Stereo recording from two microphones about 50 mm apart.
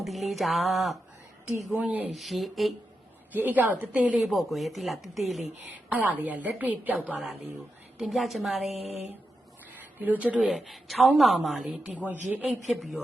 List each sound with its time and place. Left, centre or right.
0.0 s speech: centre
1.7 s a woman's voice: right
2.1 s speech: centre
3.3 s a woman's voice: right
4.3 s speech: centre
5.7 s a woman's voice: right
8.1 s speech: centre
9.7 s speech: right
10.4 s speech: centre
11.9 s a woman's voice: right
12.6 s speech: centre